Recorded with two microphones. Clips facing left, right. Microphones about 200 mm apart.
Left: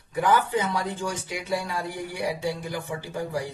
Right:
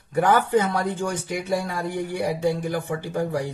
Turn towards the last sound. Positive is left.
turn(degrees=-60)  # may be behind; listen again after turning